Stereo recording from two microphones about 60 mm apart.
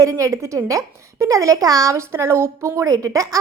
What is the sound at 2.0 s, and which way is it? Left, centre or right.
A woman's voice, right.